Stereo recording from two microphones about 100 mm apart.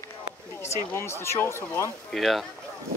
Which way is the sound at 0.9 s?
25° left (ahead or behind).